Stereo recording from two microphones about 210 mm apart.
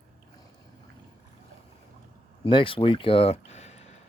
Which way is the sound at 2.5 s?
25° left (ahead or behind).